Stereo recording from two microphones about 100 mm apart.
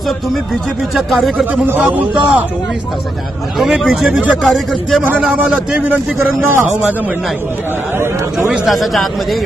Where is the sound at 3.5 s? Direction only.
5° right (ahead or behind).